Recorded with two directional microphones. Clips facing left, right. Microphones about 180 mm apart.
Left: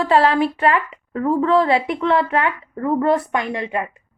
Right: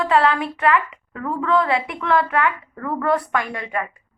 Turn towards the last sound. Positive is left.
turn(degrees=25)  # may be behind; listen again after turning